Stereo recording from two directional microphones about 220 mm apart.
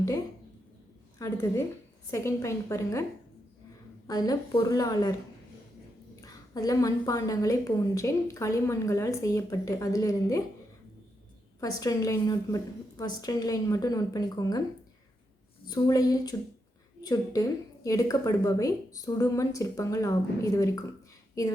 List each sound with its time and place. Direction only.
1.2 s a woman's voice: 15° left (ahead or behind)
4.0 s a woman's voice: 15° left (ahead or behind)
6.2 s a woman's voice: 15° left (ahead or behind)
11.6 s a woman's voice: 15° left (ahead or behind)
15.6 s a woman's voice: 15° left (ahead or behind)